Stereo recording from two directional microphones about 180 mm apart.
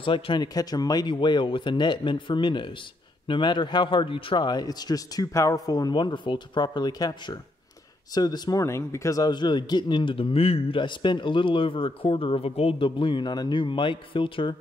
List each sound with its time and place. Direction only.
0.0 s a man's voice: 25° left (ahead or behind)